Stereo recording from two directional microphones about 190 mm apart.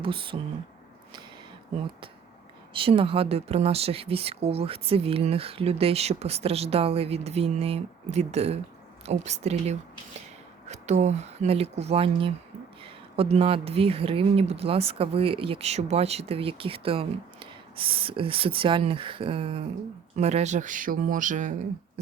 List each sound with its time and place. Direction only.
0.0 s speech: 25° right (ahead or behind)
2.7 s speech: 30° right (ahead or behind)